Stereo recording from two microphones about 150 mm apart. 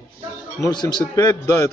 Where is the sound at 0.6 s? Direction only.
30° left (ahead or behind).